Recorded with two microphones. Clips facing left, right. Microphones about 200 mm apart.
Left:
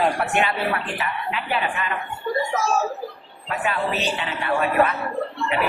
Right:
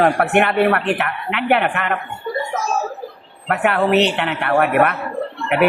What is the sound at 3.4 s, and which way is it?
A woman's voice, 65° right (ahead or behind).